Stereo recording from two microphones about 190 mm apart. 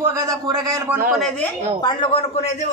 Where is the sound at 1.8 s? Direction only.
25° left (ahead or behind).